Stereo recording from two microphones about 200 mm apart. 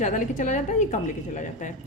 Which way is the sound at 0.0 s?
40° left (ahead or behind).